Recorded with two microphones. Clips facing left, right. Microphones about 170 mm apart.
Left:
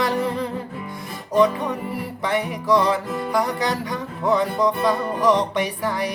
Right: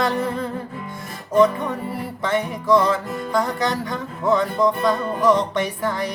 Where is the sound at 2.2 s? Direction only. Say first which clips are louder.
Right 1 dB; 15° left (ahead or behind).